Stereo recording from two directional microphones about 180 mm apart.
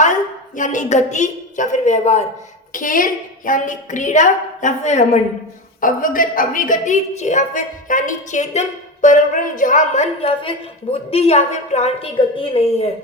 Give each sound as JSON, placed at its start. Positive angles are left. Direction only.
{"t": 0.0, "sound": "a woman's voice", "side_deg": 45}
{"t": 5.8, "sound": "a woman's voice", "side_deg": 50}